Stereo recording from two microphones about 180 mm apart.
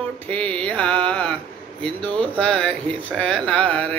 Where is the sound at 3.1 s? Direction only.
5° left (ahead or behind).